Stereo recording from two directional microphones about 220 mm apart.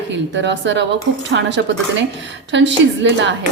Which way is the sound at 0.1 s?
55° right (ahead or behind).